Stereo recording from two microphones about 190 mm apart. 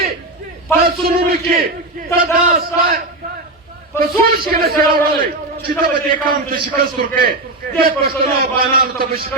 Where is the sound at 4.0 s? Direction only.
50° right (ahead or behind).